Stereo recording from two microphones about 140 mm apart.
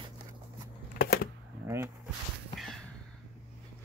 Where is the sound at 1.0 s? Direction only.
90° left.